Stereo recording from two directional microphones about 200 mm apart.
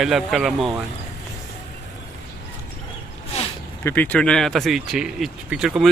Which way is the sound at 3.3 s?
35° left (ahead or behind).